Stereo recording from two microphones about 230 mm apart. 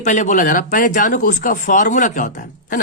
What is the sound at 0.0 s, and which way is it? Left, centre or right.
Speech, left.